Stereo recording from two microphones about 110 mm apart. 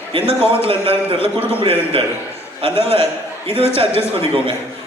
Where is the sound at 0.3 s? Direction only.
55° right (ahead or behind).